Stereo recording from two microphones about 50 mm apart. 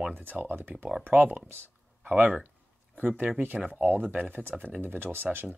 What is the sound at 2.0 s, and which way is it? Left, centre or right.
Speech, right.